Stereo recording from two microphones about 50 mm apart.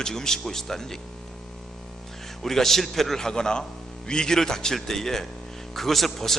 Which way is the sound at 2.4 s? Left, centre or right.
Centre.